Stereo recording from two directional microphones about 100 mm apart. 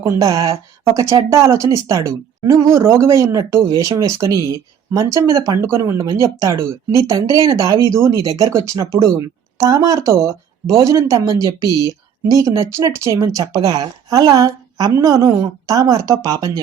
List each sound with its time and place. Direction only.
0.1 s speech: 35° right (ahead or behind)